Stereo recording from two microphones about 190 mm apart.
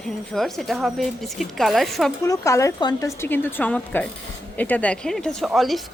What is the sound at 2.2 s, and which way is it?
A woman's voice, 15° left (ahead or behind).